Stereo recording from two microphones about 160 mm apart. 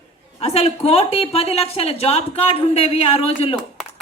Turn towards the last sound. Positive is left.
turn(degrees=40)  # may be behind; listen again after turning